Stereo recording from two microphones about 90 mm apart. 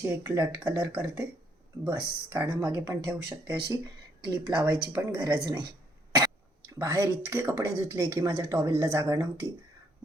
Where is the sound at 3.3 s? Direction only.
45° right (ahead or behind).